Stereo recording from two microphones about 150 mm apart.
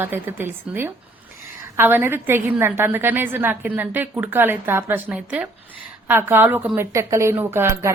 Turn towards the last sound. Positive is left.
turn(degrees=-15)  # may be behind; listen again after turning